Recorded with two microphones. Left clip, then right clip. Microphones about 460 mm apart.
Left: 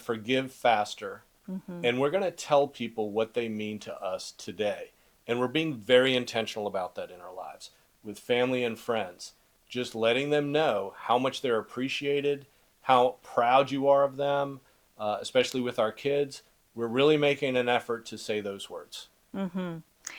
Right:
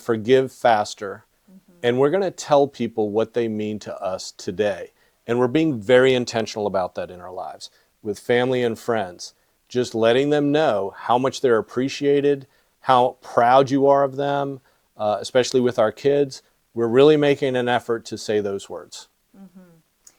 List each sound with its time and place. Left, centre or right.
0.0 s speech: right
19.4 s speech: left